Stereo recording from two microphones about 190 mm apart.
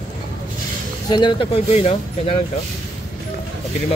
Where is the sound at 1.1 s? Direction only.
25° left (ahead or behind).